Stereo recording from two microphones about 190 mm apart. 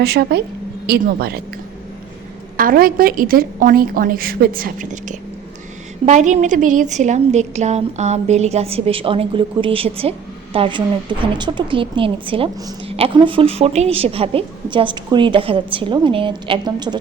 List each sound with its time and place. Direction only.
0.0 s speech: 55° right (ahead or behind)
2.6 s a woman's voice: 50° right (ahead or behind); by 17.0 s 25° right (ahead or behind)